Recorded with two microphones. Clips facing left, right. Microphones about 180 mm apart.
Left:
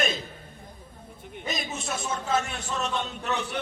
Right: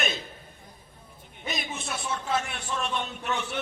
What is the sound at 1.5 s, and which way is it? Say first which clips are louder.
Speech: left 2 dB; 45° left (ahead or behind).